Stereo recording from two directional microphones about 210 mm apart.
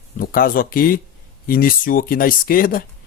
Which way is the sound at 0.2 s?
45° left (ahead or behind).